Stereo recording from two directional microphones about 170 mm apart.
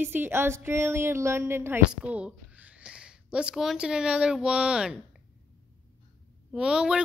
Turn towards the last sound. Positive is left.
turn(degrees=-5)  # may be behind; listen again after turning